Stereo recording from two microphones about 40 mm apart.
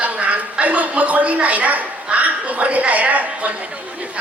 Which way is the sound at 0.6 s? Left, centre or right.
Right.